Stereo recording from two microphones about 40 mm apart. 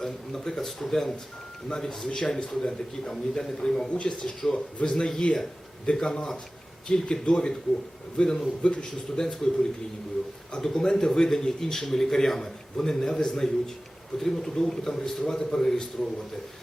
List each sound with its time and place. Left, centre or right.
0.0 s a man's voice: centre
3.8 s speech: left
4.1 s a man's voice: centre
10.5 s a man's voice: centre